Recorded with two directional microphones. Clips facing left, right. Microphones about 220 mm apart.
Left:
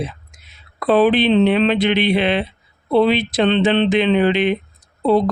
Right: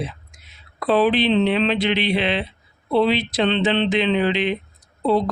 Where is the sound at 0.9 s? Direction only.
50° left (ahead or behind).